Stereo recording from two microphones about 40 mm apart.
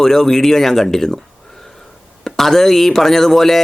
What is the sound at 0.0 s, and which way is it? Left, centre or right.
Speech, centre.